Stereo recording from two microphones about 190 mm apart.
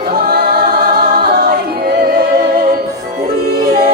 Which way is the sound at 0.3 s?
55° right (ahead or behind).